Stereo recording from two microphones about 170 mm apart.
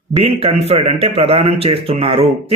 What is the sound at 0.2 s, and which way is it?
Speech, 35° right (ahead or behind).